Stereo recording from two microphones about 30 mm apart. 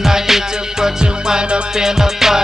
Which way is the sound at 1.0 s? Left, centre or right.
Right.